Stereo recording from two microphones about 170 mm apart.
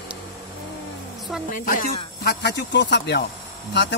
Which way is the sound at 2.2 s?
80° left.